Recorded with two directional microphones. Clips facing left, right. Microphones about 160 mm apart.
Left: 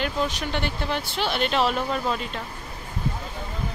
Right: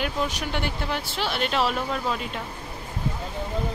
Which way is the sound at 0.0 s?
5° right (ahead or behind).